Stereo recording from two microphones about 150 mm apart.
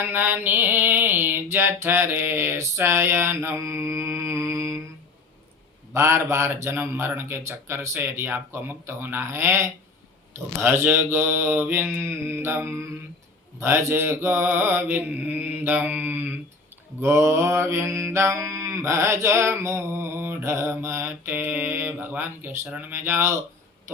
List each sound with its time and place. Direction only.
0.0 s mantra: 15° right (ahead or behind)
5.9 s mantra: 20° right (ahead or behind)